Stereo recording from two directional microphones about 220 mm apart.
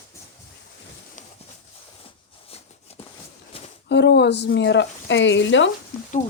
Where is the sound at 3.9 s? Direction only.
50° left (ahead or behind).